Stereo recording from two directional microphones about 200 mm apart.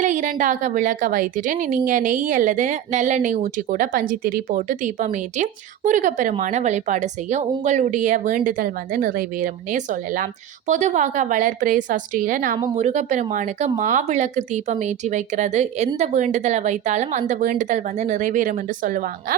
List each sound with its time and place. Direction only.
0.0 s a woman's voice: 40° right (ahead or behind)